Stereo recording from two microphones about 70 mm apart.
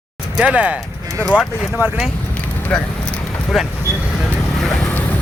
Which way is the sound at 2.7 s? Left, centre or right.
Centre.